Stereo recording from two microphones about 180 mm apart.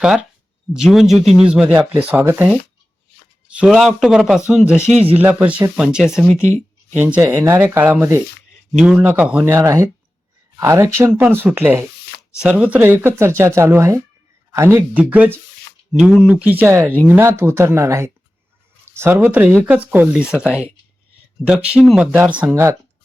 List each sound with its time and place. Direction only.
0.0 s speech: 5° right (ahead or behind)
4.9 s speech: 35° right (ahead or behind)
5.1 s speech: 10° right (ahead or behind)